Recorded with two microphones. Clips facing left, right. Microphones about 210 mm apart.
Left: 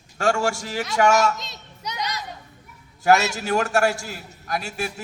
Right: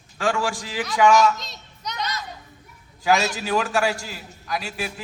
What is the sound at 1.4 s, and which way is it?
Children playing, centre (ahead or behind).